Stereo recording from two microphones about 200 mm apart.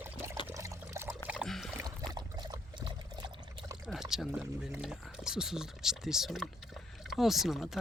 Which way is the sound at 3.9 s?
Centre (ahead or behind).